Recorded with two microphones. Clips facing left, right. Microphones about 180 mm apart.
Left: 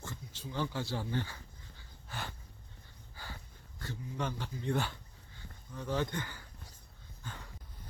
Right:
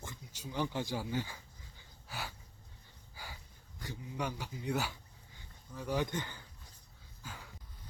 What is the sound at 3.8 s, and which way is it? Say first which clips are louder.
Speech: left 1 dB; 15° right (ahead or behind).